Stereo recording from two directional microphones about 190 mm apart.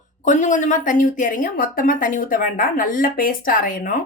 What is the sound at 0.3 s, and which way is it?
Speech, 40° left (ahead or behind).